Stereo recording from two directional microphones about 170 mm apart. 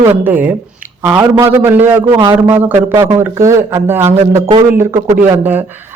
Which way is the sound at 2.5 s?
10° right (ahead or behind).